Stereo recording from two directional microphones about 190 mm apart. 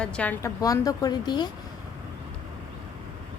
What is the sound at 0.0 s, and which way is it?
A woman's voice, 5° left (ahead or behind).